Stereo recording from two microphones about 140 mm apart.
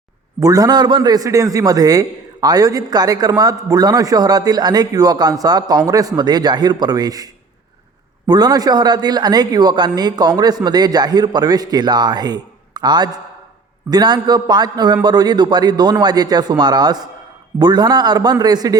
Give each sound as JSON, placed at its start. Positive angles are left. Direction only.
{"t": 0.3, "sound": "a man's voice", "side_deg": -25}
{"t": 8.3, "sound": "a man's voice", "side_deg": -30}